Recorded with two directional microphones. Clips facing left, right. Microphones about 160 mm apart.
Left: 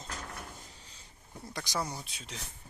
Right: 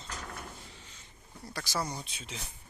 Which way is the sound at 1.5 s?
20° left (ahead or behind).